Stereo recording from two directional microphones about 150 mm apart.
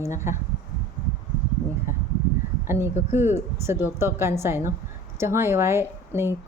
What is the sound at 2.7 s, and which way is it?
A woman's voice, 15° right (ahead or behind).